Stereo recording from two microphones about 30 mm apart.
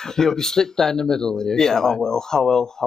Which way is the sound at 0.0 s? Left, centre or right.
Centre.